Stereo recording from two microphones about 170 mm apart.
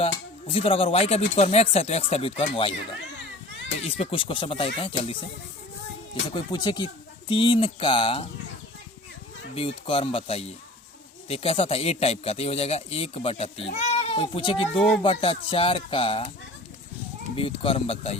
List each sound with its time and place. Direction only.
0.0 s speech: 35° left (ahead or behind)
3.8 s speech: 35° left (ahead or behind)
6.3 s speech: 25° left (ahead or behind)
9.6 s speech: 30° left (ahead or behind)
14.8 s speech: centre (ahead or behind)
15.0 s speech: 35° left (ahead or behind)
17.3 s speech: 35° left (ahead or behind)